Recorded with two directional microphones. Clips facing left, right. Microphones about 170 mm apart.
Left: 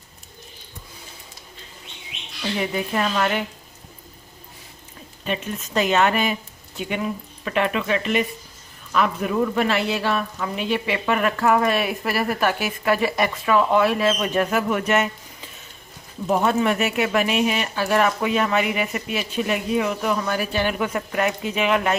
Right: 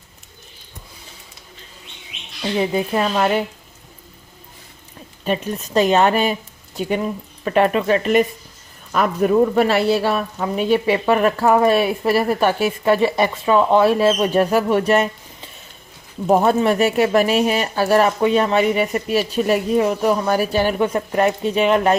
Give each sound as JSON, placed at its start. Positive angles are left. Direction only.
{"t": 2.6, "sound": "speech", "side_deg": -30}
{"t": 5.2, "sound": "speech", "side_deg": -40}